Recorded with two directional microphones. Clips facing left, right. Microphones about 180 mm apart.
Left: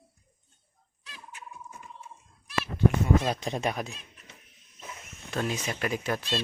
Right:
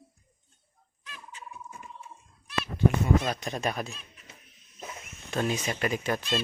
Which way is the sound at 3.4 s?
25° left (ahead or behind).